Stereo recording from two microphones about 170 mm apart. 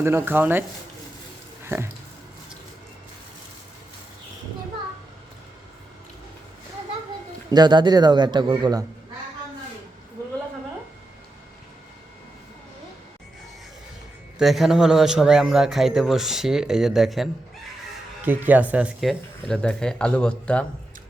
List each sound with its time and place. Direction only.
0.0 s speech: 15° right (ahead or behind)
1.6 s speech: 15° right (ahead or behind)
7.5 s a man's voice: 25° right (ahead or behind)
14.3 s a man's voice: centre (ahead or behind)